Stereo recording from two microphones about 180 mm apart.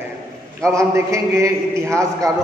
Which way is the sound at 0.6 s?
15° right (ahead or behind).